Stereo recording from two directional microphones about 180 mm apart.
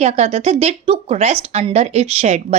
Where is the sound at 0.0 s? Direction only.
40° right (ahead or behind).